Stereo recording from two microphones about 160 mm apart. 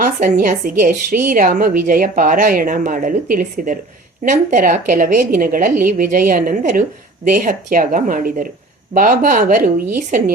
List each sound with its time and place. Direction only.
0.0 s a woman's voice: 60° right (ahead or behind)